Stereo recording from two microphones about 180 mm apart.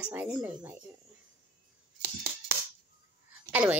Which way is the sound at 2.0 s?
15° right (ahead or behind).